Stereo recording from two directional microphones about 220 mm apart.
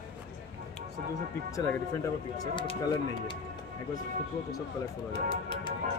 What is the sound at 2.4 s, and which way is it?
Speech, 20° left (ahead or behind).